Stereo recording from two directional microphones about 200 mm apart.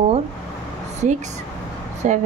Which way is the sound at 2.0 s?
35° right (ahead or behind).